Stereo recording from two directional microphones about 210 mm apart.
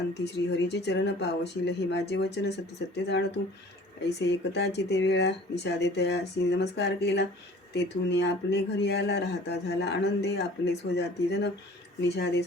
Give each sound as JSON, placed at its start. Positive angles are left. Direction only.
{"t": 0.1, "sound": "speech", "side_deg": 55}